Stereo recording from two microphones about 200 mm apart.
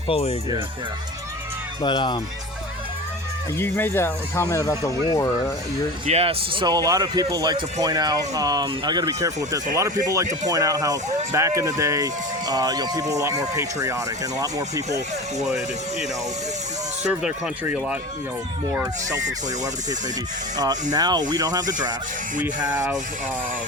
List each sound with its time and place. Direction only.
0.1 s speech: 30° left (ahead or behind)
1.8 s speech: 20° left (ahead or behind)
3.6 s speech: 10° left (ahead or behind)
6.1 s speech: 30° right (ahead or behind)
17.0 s speech: 5° right (ahead or behind)
20.9 s speech: 20° right (ahead or behind)
22.4 s speech: 10° right (ahead or behind)